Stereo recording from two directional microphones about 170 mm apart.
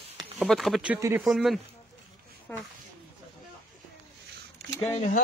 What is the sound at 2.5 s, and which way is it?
Speech, 10° left (ahead or behind).